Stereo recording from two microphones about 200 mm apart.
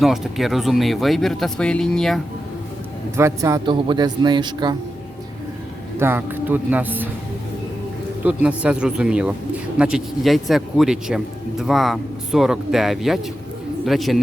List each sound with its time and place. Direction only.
0.0 s speech: centre (ahead or behind)
3.2 s speech: 15° right (ahead or behind)
6.0 s speech: 10° right (ahead or behind)
8.2 s speech: 5° right (ahead or behind)